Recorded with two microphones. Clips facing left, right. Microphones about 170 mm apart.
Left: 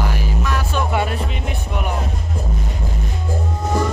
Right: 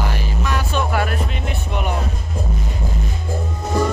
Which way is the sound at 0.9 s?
25° left (ahead or behind).